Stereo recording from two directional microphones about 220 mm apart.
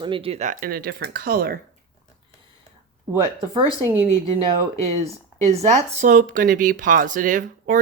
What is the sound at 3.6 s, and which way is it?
Speech, 20° left (ahead or behind).